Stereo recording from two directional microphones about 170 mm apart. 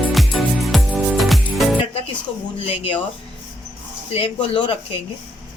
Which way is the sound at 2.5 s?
35° left (ahead or behind).